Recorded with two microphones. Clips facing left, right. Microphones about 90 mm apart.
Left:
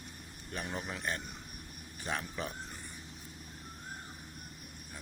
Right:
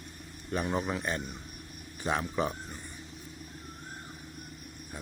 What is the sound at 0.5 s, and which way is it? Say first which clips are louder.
Speech: right 9 dB; 45° right (ahead or behind).